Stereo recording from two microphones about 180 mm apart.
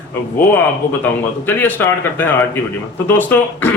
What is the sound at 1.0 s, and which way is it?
A man's voice, 10° left (ahead or behind).